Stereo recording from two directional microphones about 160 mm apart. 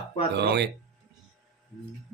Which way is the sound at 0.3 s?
90° right.